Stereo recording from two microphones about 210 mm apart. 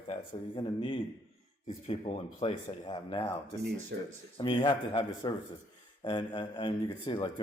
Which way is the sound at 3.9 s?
50° right (ahead or behind).